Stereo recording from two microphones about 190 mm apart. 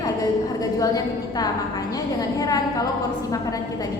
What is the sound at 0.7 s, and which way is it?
A woman's voice, 20° left (ahead or behind).